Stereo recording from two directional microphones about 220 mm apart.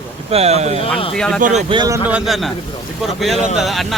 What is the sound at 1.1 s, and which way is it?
Speech, centre (ahead or behind).